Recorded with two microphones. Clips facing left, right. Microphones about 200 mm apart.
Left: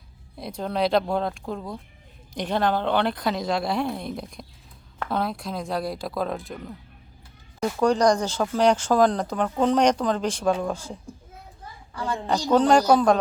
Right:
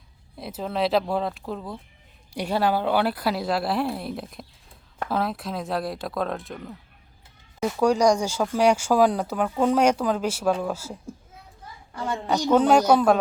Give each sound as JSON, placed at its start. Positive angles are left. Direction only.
{"t": 0.3, "sound": "speech", "side_deg": 0}
{"t": 11.9, "sound": "a woman's voice", "side_deg": -25}
{"t": 12.5, "sound": "speech", "side_deg": -5}